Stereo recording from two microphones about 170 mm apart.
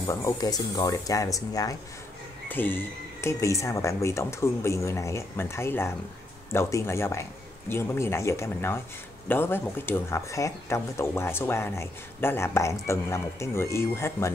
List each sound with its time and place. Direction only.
0.0 s speech: 20° left (ahead or behind)